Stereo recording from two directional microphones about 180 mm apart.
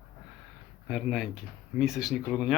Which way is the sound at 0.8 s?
5° right (ahead or behind).